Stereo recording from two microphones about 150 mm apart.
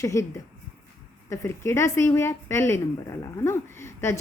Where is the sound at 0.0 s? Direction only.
20° left (ahead or behind).